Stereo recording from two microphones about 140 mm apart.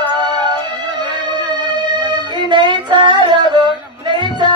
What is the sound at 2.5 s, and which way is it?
Yodeling, 35° right (ahead or behind).